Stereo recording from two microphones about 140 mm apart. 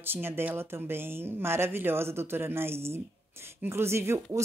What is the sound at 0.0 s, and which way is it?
Speech, 15° right (ahead or behind).